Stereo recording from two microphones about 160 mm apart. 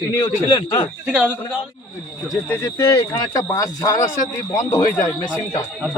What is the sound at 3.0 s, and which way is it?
A man's voice, 20° left (ahead or behind).